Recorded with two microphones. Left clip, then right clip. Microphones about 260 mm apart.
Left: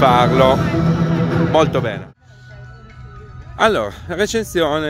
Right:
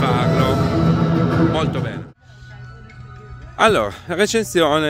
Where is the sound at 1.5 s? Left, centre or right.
Centre.